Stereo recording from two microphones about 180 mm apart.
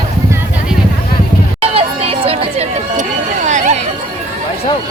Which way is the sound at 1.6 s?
30° right (ahead or behind).